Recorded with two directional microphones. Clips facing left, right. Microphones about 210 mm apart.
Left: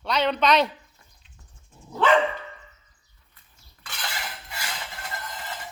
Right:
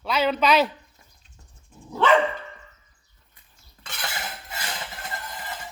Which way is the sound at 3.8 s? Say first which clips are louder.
Right 2 dB; 25° right (ahead or behind).